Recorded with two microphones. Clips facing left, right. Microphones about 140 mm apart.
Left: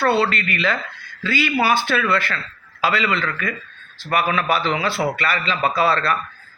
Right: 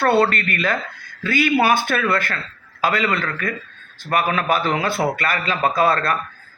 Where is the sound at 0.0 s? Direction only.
50° right (ahead or behind).